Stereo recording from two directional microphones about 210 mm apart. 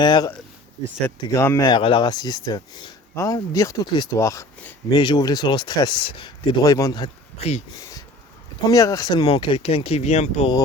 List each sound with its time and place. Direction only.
0.0 s speech: 20° left (ahead or behind)
8.6 s speech: 15° left (ahead or behind)